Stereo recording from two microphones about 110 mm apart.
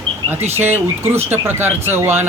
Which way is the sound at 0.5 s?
20° right (ahead or behind).